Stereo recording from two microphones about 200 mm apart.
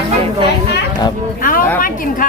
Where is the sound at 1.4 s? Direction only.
45° left (ahead or behind).